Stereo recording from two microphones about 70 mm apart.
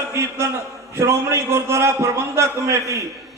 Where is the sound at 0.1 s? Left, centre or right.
Right.